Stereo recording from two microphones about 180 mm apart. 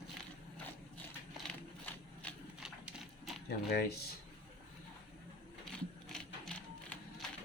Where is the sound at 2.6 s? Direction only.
5° right (ahead or behind).